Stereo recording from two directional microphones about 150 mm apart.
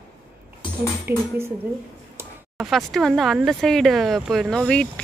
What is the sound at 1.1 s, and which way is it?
Speech, 15° right (ahead or behind).